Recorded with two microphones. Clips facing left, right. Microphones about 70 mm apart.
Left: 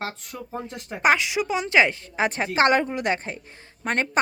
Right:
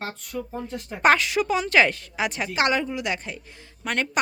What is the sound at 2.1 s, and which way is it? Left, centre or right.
A woman's voice, left.